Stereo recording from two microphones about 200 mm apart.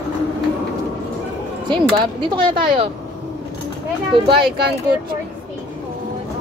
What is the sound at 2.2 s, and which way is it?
Speech, 25° right (ahead or behind).